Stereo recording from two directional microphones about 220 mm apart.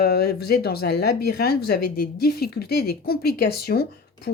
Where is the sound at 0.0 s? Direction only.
45° left (ahead or behind).